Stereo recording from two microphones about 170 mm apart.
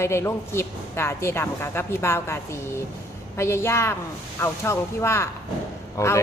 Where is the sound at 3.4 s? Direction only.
15° left (ahead or behind).